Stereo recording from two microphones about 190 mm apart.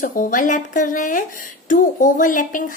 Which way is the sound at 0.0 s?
45° left (ahead or behind).